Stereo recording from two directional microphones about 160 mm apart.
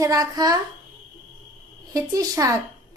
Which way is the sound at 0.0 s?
20° right (ahead or behind).